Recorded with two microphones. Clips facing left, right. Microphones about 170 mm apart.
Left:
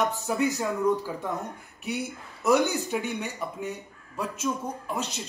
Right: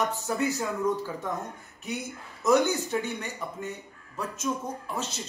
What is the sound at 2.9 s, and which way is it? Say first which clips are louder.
Speech: left 1 dB; 10° left (ahead or behind).